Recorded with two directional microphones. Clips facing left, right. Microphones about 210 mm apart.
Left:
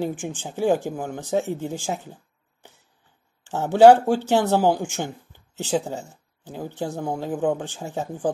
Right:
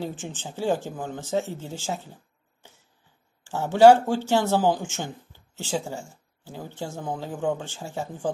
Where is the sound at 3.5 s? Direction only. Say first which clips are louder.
Left 2 dB; 15° left (ahead or behind).